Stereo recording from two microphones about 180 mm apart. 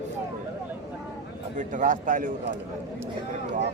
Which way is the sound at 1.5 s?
45° right (ahead or behind).